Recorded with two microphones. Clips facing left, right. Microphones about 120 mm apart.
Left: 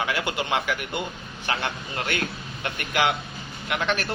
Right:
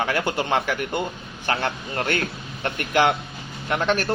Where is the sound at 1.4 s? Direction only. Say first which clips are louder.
Right 4 dB; 50° right (ahead or behind).